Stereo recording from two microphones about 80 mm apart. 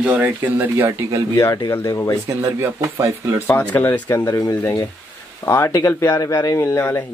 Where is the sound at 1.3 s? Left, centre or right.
Left.